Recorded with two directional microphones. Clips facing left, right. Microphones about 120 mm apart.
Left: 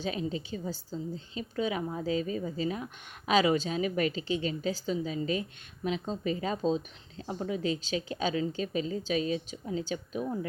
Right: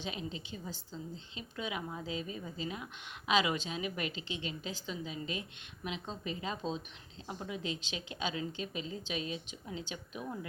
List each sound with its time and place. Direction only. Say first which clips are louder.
0.0 s a woman's voice: left 8 dB; 40° left (ahead or behind)